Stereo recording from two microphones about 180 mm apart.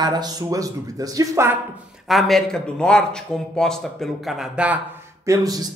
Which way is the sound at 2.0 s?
Centre (ahead or behind).